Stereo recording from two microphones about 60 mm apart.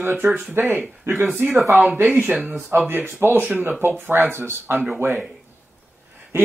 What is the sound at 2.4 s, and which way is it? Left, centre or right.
Speech, right.